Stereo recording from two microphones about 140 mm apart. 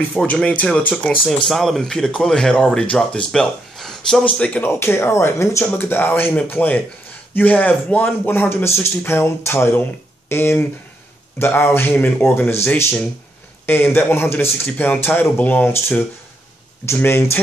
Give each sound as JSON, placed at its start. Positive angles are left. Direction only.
{"t": 0.1, "sound": "speech", "side_deg": 5}
{"t": 13.7, "sound": "speech", "side_deg": 15}